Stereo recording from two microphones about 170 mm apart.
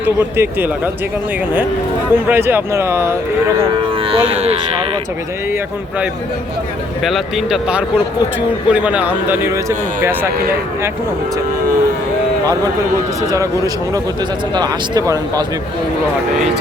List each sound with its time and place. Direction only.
0.0 s speech: 10° right (ahead or behind)
2.2 s speech: 10° right (ahead or behind)
4.3 s speech: 35° right (ahead or behind)
7.0 s a man's voice: centre (ahead or behind)
14.5 s speech: 25° right (ahead or behind)